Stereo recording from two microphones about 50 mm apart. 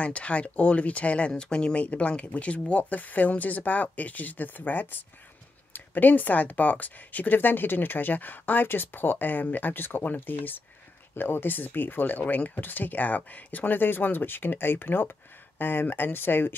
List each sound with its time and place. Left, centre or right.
0.0 s speech: left